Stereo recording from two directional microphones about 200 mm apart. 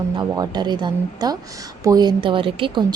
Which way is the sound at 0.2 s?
20° right (ahead or behind).